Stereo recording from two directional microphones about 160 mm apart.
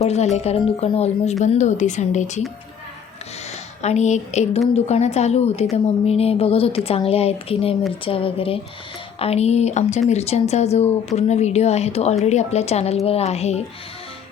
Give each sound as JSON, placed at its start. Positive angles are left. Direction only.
{"t": 0.0, "sound": "a woman's voice", "side_deg": 45}
{"t": 3.8, "sound": "a woman's voice", "side_deg": 45}